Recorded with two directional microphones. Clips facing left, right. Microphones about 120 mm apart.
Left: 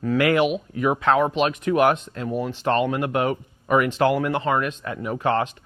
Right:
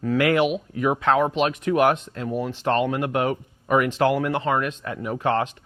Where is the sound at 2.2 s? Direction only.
25° left (ahead or behind).